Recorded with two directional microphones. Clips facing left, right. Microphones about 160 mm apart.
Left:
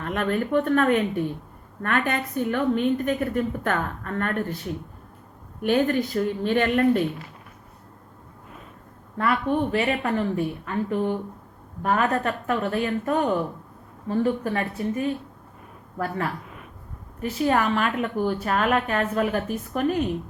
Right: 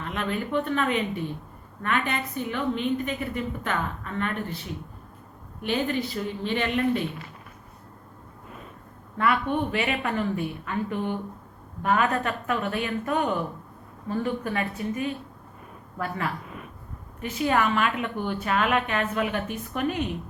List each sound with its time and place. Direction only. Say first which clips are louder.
0.0 s a woman's voice: left 5 dB; 50° left (ahead or behind)
5.6 s a woman's voice: left 5 dB; 50° left (ahead or behind)
9.1 s a woman's voice: left 1 dB; 40° left (ahead or behind)